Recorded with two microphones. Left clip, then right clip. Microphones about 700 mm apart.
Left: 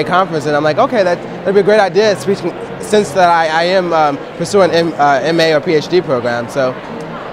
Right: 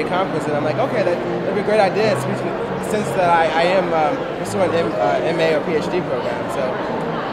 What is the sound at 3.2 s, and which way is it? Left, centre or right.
Speech, left.